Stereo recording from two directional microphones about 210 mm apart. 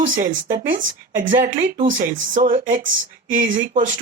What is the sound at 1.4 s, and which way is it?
Speech, 35° right (ahead or behind).